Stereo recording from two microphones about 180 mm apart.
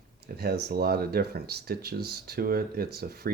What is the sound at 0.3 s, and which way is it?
Speech, 60° right (ahead or behind).